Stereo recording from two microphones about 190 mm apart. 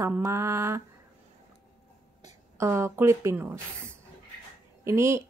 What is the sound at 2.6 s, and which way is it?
Speech, 15° right (ahead or behind).